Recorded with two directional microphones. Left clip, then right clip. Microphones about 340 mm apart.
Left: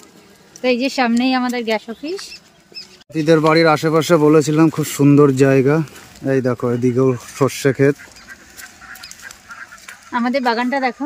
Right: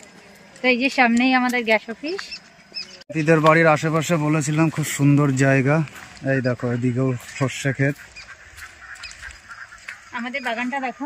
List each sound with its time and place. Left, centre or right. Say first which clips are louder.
0.6 s speech: left 1 dB; centre
3.2 s speech: left 3 dB; centre
10.2 s speech: left 8 dB; centre